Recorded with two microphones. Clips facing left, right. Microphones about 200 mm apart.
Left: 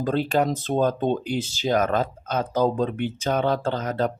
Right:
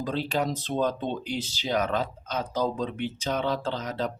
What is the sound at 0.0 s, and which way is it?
Speech, 50° left (ahead or behind).